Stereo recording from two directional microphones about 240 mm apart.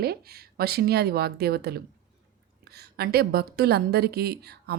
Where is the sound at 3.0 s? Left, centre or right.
Right.